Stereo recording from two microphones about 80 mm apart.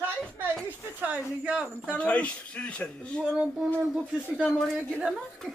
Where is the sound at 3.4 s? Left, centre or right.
Centre.